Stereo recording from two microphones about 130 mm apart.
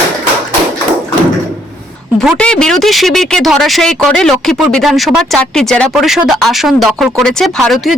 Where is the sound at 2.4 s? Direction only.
5° left (ahead or behind).